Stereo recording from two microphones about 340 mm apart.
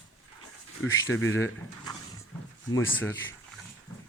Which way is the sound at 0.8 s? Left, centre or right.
Left.